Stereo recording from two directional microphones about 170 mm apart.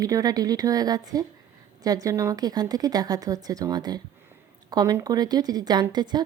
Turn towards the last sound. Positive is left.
turn(degrees=-25)  # may be behind; listen again after turning